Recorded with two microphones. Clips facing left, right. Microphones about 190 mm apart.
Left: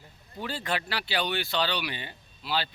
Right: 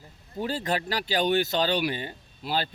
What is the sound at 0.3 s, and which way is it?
Speech, 40° right (ahead or behind).